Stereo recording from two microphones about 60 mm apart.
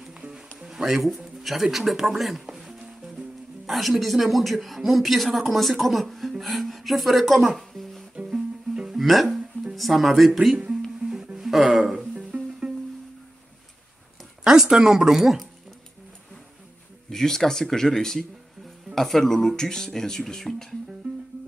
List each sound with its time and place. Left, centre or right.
0.2 s music: centre
3.6 s speech: centre
8.3 s music: centre
9.8 s speech: centre
11.0 s music: centre
12.1 s music: centre
14.4 s speech: centre
17.1 s speech: centre